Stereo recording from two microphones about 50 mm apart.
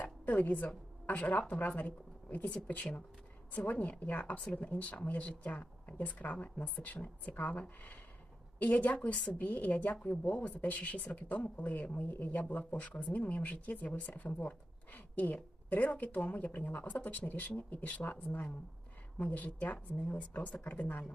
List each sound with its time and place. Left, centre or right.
0.0 s a sound: left
1.0 s speech: left
3.6 s a woman's voice: left